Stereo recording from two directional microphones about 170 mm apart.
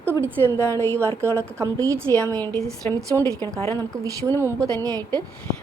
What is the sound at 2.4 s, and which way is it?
Speech, 10° left (ahead or behind).